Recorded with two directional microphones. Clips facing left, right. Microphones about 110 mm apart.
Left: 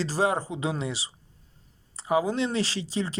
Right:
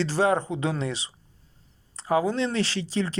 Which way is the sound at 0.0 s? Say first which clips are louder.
Right 3 dB; 35° left (ahead or behind).